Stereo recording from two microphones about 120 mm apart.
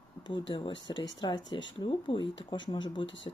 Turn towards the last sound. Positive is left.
turn(degrees=45)  # may be behind; listen again after turning